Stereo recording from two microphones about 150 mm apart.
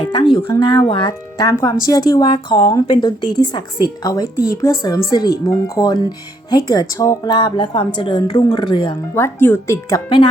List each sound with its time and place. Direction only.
0.0 s a sound: 30° left (ahead or behind)
0.6 s speech: 30° left (ahead or behind)
9.1 s speech: 15° left (ahead or behind)